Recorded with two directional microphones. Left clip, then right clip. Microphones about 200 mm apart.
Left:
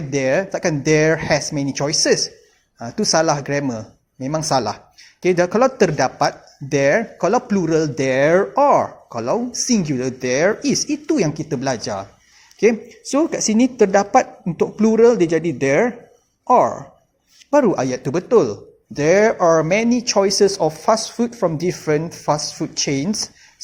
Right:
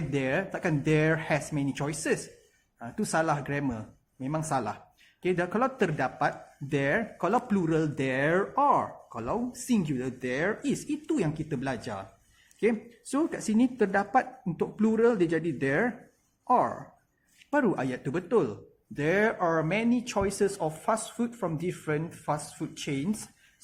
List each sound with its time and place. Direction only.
0.1 s speech: 40° left (ahead or behind)
13.1 s speech: 30° left (ahead or behind)